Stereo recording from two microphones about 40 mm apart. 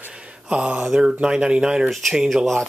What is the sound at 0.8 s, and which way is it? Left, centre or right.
Speech, centre.